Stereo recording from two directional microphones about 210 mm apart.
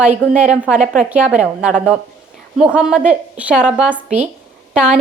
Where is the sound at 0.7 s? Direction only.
35° right (ahead or behind).